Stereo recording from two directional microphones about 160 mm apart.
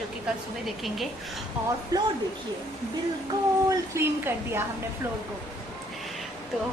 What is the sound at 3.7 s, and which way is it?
Speech, 15° right (ahead or behind).